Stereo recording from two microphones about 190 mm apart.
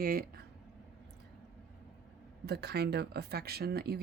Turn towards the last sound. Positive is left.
turn(degrees=-55)  # may be behind; listen again after turning